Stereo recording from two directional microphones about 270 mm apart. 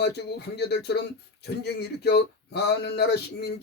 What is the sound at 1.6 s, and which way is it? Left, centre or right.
Speech, left.